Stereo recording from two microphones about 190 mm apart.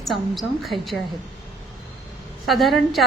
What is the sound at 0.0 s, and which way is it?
Speech, centre (ahead or behind).